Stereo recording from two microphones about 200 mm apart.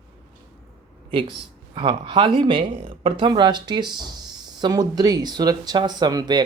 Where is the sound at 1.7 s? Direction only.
25° right (ahead or behind).